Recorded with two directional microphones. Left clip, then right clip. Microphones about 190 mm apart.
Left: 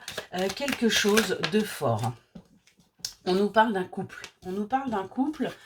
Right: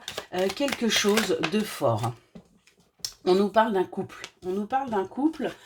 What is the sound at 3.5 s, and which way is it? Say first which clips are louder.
Speech: even; 45° right (ahead or behind).